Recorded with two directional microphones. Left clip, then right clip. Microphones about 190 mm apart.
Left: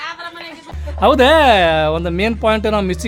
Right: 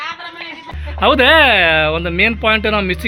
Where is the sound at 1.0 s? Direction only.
15° left (ahead or behind).